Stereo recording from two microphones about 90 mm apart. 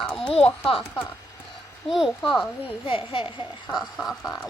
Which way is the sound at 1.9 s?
5° right (ahead or behind).